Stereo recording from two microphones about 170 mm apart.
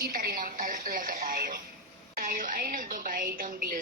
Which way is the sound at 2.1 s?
55° right (ahead or behind).